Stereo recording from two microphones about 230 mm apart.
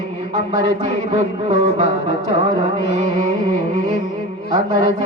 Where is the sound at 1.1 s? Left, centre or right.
Right.